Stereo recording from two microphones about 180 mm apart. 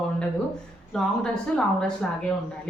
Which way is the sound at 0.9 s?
5° left (ahead or behind).